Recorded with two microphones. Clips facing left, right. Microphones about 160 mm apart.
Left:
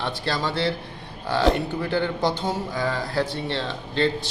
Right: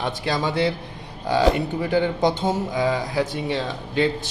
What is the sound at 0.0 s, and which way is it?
Speech, 15° right (ahead or behind).